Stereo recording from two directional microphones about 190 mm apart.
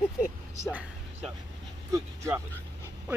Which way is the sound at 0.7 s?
5° right (ahead or behind).